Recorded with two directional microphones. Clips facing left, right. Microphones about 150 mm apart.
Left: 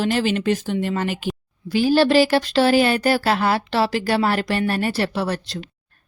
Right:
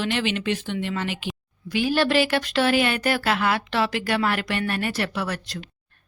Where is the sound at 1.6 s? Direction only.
30° left (ahead or behind).